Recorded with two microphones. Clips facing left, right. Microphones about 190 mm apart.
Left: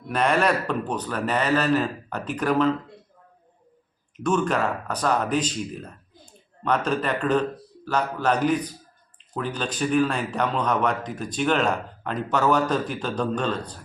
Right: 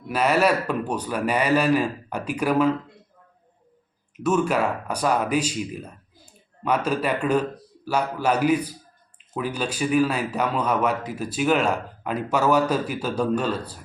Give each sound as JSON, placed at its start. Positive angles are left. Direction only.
{"t": 0.1, "sound": "speech", "side_deg": -5}
{"t": 4.2, "sound": "speech", "side_deg": -5}